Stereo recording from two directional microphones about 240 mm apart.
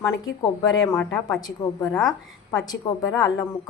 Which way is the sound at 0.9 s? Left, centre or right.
Centre.